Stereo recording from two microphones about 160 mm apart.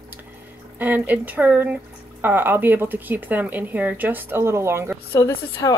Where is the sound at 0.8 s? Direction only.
10° right (ahead or behind).